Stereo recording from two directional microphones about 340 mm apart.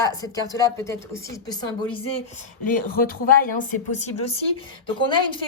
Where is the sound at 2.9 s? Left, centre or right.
Left.